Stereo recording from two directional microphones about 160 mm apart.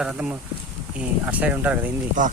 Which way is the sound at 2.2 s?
55° right (ahead or behind).